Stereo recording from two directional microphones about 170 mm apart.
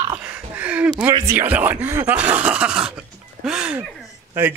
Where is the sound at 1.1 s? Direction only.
25° right (ahead or behind).